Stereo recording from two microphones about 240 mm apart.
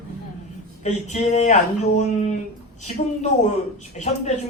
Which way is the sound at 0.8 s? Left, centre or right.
Left.